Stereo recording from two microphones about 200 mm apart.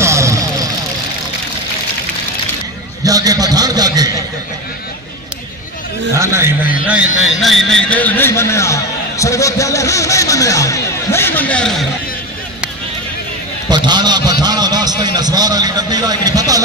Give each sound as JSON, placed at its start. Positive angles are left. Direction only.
{"t": 0.0, "sound": "vehicle", "side_deg": -15}
{"t": 3.0, "sound": "a sound", "side_deg": -20}
{"t": 6.1, "sound": "a man's voice", "side_deg": -15}
{"t": 7.4, "sound": "a man's voice", "side_deg": 0}
{"t": 13.7, "sound": "a man's voice", "side_deg": -20}